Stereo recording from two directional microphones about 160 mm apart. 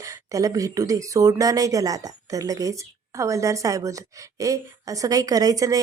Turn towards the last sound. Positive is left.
turn(degrees=-20)  # may be behind; listen again after turning